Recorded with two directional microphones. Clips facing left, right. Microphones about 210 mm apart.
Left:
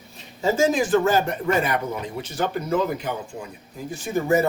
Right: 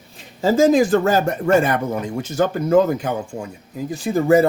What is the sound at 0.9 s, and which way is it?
Speech, 45° right (ahead or behind).